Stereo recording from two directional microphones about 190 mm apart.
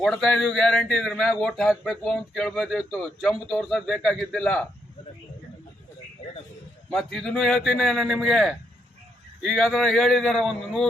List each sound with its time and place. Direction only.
0.0 s speech: 5° left (ahead or behind)
6.9 s speech: centre (ahead or behind)